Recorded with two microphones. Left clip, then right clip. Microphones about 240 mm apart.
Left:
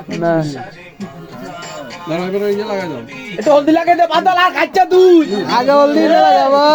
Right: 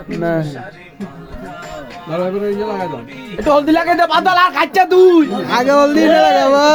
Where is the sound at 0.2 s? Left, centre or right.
Right.